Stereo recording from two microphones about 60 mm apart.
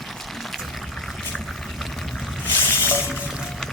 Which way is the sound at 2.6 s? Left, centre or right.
Left.